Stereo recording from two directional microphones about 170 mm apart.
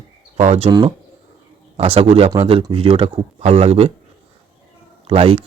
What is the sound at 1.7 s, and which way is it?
Speech, 35° right (ahead or behind).